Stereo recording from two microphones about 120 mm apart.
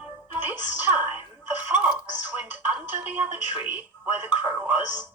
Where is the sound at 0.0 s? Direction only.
15° right (ahead or behind).